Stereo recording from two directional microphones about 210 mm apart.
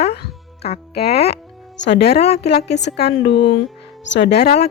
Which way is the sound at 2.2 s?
30° left (ahead or behind).